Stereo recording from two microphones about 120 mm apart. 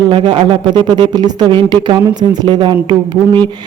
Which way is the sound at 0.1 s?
45° right (ahead or behind).